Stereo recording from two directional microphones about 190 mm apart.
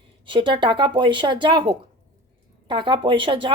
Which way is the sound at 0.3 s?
25° right (ahead or behind).